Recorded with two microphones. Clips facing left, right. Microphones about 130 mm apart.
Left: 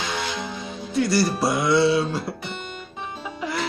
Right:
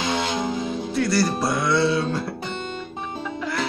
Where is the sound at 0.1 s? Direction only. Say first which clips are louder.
Right 5 dB; 35° right (ahead or behind).